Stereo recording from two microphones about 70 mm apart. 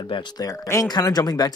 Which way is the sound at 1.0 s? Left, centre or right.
Left.